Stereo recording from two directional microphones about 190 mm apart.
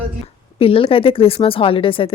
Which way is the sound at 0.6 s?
30° left (ahead or behind).